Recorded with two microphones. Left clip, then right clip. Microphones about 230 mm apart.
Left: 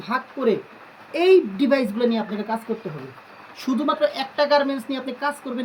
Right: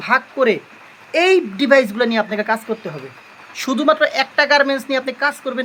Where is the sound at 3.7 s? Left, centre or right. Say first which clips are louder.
Right 6 dB; centre.